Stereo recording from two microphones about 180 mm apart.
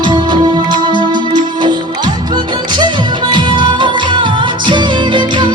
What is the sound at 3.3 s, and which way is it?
Music, 25° right (ahead or behind).